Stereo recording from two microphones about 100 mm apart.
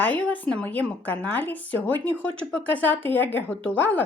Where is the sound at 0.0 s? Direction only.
15° left (ahead or behind).